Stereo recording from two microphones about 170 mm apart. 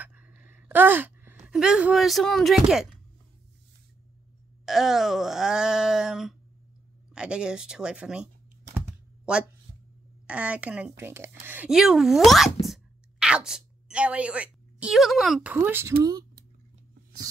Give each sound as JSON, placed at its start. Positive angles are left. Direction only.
{"t": 0.0, "sound": "a sound", "side_deg": -10}
{"t": 4.6, "sound": "speech", "side_deg": 0}
{"t": 8.7, "sound": "computer keyboard", "side_deg": -10}
{"t": 9.7, "sound": "a sound", "side_deg": -30}
{"t": 10.2, "sound": "speech", "side_deg": -5}
{"t": 12.6, "sound": "sneeze", "side_deg": -5}
{"t": 15.5, "sound": "speech", "side_deg": -10}